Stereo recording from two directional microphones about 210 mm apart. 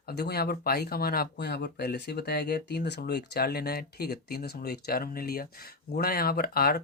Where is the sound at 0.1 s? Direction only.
50° left (ahead or behind).